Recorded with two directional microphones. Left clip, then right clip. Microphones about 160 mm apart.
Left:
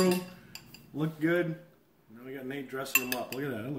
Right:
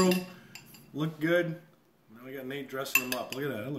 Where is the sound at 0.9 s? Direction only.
50° right (ahead or behind).